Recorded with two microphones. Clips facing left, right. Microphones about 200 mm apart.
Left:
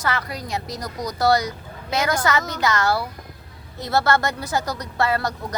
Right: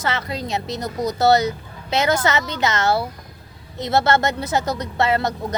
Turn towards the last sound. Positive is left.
turn(degrees=-25)  # may be behind; listen again after turning